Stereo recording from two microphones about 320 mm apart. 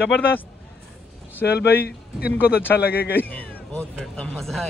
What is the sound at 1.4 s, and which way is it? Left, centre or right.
Speech, left.